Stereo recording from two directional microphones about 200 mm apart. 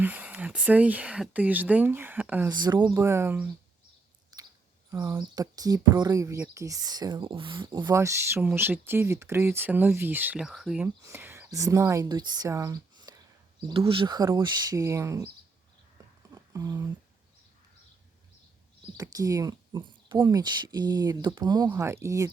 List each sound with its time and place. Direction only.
0.0 s speech: 5° right (ahead or behind)
2.5 s speech: 20° right (ahead or behind)
4.3 s chewing: 20° right (ahead or behind)
4.9 s speech: 15° right (ahead or behind)
10.8 s speech: 10° right (ahead or behind)
16.3 s a sound: 20° right (ahead or behind)
18.9 s speech: 15° right (ahead or behind)